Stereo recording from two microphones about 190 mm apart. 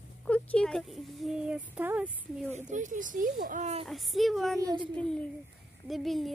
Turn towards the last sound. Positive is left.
turn(degrees=0)  # may be behind; listen again after turning